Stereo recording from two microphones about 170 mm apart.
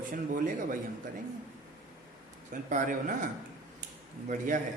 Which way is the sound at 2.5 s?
50° right (ahead or behind).